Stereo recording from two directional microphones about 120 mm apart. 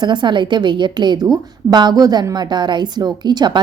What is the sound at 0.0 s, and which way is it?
A woman's voice, 40° right (ahead or behind).